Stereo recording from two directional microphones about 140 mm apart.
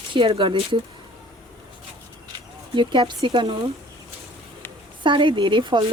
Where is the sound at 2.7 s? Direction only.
35° right (ahead or behind).